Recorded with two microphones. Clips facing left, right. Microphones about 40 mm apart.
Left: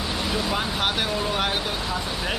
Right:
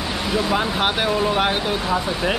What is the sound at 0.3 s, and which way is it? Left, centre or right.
Speech, centre.